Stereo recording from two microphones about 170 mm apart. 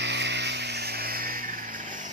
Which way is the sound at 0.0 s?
90° right.